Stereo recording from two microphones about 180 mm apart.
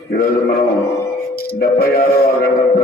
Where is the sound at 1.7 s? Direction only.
55° left (ahead or behind).